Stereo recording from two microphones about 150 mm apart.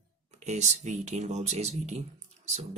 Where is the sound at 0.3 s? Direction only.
50° right (ahead or behind).